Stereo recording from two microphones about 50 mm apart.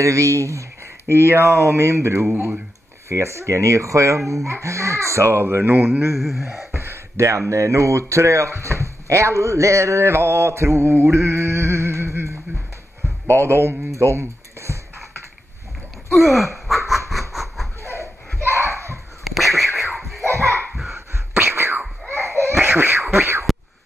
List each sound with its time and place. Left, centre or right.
0.0 s speech: right
1.1 s speech: right
6.1 s speech: centre
6.7 s speech: right
13.3 s speech: right
16.1 s laughter: centre
17.1 s a sound: centre
17.8 s a sound: right
19.2 s a sound: centre
21.4 s whispering: right
22.2 s laughter: right
22.6 s laughter: right
23.1 s a sound: right